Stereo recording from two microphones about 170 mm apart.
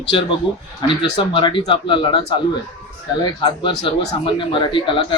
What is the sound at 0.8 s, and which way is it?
Speech, 30° left (ahead or behind).